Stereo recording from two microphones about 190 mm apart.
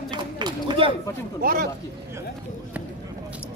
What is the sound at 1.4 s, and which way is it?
Speech, 50° right (ahead or behind).